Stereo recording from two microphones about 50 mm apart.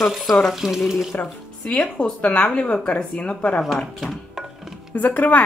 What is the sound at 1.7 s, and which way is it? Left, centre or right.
Speech, left.